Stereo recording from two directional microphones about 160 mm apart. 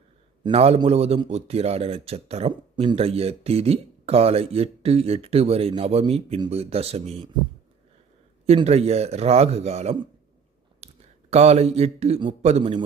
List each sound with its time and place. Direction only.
0.4 s speech: 40° right (ahead or behind)
8.4 s speech: 40° right (ahead or behind)
10.8 s a sound: 40° right (ahead or behind)
11.3 s speech: 40° right (ahead or behind)